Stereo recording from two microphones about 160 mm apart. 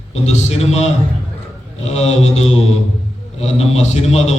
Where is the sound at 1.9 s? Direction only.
40° left (ahead or behind).